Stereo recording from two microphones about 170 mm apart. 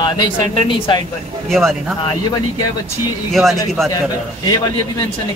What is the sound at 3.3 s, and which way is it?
Speech, centre (ahead or behind).